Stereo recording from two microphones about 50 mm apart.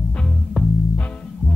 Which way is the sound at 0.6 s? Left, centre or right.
Right.